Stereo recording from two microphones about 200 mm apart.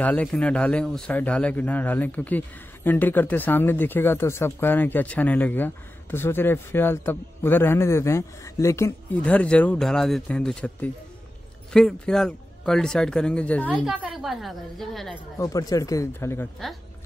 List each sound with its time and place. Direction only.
0.0 s speech: 5° left (ahead or behind)
15.3 s speech: 15° left (ahead or behind)